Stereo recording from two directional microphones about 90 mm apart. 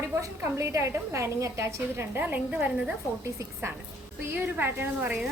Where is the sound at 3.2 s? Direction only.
35° right (ahead or behind).